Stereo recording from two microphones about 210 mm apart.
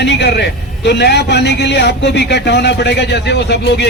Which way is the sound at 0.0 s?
55° left (ahead or behind).